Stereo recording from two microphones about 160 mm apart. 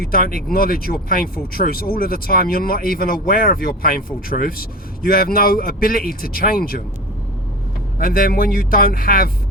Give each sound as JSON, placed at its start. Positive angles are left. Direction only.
{"t": 0.0, "sound": "speech", "side_deg": 65}
{"t": 7.9, "sound": "speech", "side_deg": 65}